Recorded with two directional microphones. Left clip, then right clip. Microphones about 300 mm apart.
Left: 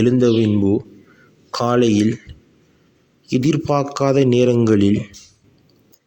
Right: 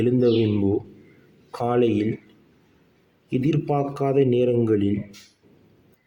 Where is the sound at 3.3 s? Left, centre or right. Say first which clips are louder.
Left 6 dB; left.